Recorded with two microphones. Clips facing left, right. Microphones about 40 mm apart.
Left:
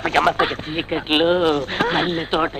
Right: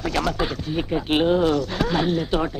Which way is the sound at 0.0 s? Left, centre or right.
Left.